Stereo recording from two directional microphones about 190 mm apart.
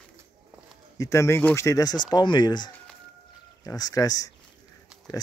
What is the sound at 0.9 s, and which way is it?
Speech, 15° left (ahead or behind).